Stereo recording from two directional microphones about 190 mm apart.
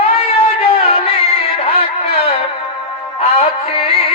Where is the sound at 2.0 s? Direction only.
35° left (ahead or behind).